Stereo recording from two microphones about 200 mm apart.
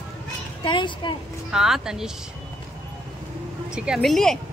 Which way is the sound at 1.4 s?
5° right (ahead or behind).